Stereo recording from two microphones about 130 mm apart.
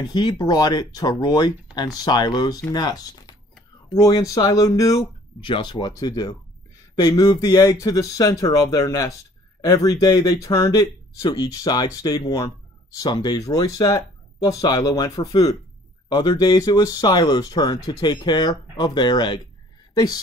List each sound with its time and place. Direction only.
0.0 s speech: 30° left (ahead or behind)
5.4 s speech: 35° left (ahead or behind)